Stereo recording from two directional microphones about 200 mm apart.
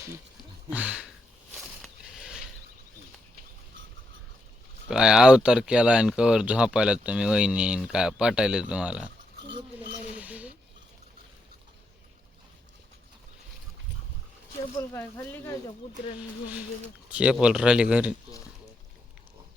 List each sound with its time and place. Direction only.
0.7 s speech: 5° right (ahead or behind)
1.5 s a sound: centre (ahead or behind)
4.9 s speech: 5° right (ahead or behind)
10.2 s a sound: 5° right (ahead or behind)
14.8 s speech: 15° left (ahead or behind)
17.1 s speech: 5° right (ahead or behind)